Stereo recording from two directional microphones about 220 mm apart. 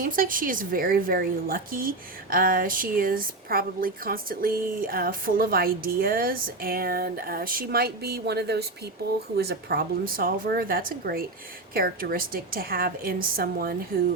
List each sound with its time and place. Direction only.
0.0 s a woman's voice: 40° right (ahead or behind)